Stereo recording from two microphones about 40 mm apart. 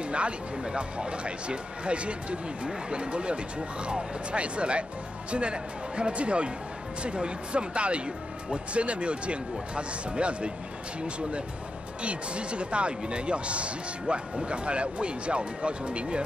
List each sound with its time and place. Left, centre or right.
0.0 s speech: right